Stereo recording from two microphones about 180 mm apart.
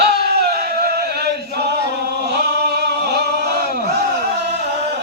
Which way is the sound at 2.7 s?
65° right (ahead or behind).